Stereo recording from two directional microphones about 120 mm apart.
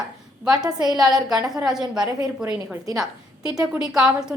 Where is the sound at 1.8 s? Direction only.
35° right (ahead or behind).